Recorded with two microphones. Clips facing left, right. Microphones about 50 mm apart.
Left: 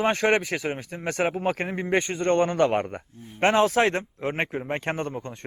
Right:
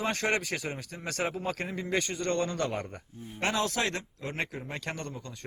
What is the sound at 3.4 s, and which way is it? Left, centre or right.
A man's voice, left.